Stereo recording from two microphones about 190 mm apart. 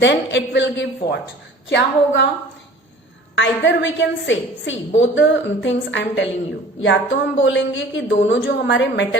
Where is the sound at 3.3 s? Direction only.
75° left (ahead or behind).